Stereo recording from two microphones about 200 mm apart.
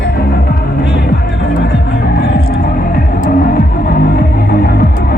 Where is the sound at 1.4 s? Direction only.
50° left (ahead or behind).